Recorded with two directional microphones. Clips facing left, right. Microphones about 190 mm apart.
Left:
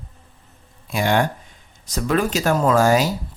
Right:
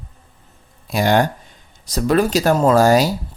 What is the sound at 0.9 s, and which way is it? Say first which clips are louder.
Speech: right 3 dB; 35° right (ahead or behind).